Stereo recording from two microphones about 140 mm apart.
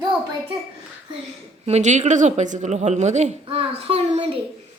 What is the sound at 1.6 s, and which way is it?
A woman's voice, 55° right (ahead or behind).